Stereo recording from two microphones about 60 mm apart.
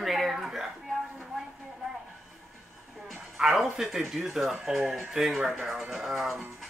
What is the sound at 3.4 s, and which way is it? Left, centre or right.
Speech, centre.